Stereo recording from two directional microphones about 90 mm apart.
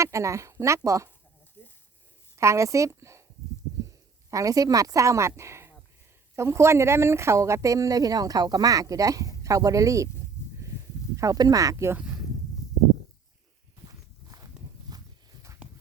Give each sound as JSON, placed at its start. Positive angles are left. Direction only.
{"t": 0.0, "sound": "speech", "side_deg": -35}
{"t": 1.6, "sound": "speech", "side_deg": 20}
{"t": 2.4, "sound": "speech", "side_deg": -35}
{"t": 4.3, "sound": "speech", "side_deg": -40}
{"t": 10.4, "sound": "a sound", "side_deg": 25}
{"t": 11.2, "sound": "speech", "side_deg": -40}
{"t": 13.8, "sound": "walk", "side_deg": -40}
{"t": 14.8, "sound": "a sound", "side_deg": -45}